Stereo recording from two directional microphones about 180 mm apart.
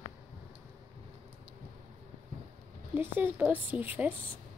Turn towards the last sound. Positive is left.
turn(degrees=-10)  # may be behind; listen again after turning